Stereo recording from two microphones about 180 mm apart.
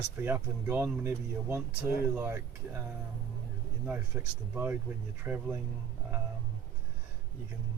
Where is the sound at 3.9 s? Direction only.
10° right (ahead or behind).